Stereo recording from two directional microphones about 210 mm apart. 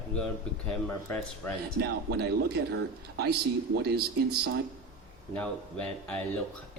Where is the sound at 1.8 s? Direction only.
50° right (ahead or behind).